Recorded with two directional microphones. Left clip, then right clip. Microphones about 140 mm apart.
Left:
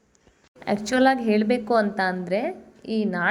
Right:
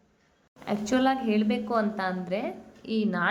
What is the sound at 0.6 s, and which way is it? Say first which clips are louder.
A woman's voice: left 6 dB; 30° left (ahead or behind).